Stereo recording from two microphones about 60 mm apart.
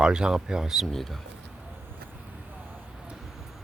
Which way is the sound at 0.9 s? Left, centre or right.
Centre.